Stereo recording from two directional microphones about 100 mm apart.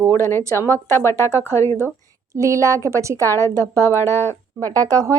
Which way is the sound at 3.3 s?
25° left (ahead or behind).